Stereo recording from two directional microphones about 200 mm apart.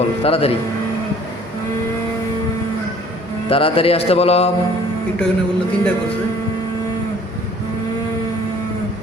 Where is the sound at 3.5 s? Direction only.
25° left (ahead or behind).